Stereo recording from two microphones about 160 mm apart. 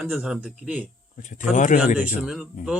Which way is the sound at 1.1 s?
50° left (ahead or behind).